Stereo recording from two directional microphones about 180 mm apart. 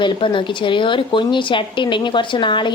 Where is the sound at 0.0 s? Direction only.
25° left (ahead or behind).